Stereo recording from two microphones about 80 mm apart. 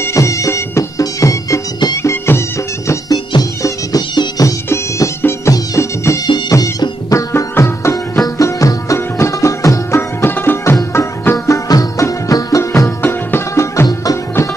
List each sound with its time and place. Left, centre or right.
0.0 s music: left
2.0 s music: left
3.1 s music: left
4.1 s music: left
4.6 s music: left
6.5 s music: left
11.4 s music: left
13.0 s music: left